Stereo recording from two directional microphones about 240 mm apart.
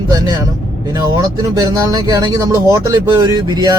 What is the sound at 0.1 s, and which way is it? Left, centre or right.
A man's voice, centre.